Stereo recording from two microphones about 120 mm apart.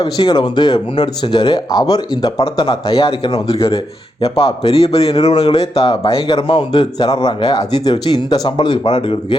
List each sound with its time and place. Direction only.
0.0 s a man's voice: 45° left (ahead or behind)